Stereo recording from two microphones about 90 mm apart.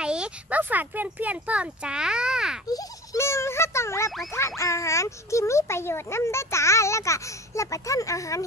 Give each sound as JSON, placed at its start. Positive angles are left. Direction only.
{"t": 0.0, "sound": "speech", "side_deg": -10}
{"t": 2.7, "sound": "music", "side_deg": 40}
{"t": 4.3, "sound": "speech", "side_deg": 30}